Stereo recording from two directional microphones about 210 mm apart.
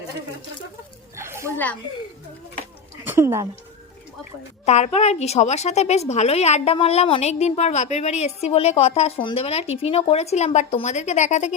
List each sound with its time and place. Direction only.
1.1 s a sound: 10° right (ahead or behind)
3.0 s speech: 10° right (ahead or behind)
4.6 s a woman's voice: 30° left (ahead or behind)